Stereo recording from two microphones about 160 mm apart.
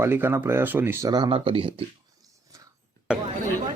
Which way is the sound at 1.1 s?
25° right (ahead or behind).